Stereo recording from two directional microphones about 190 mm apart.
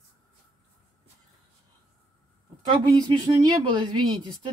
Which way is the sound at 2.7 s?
20° right (ahead or behind).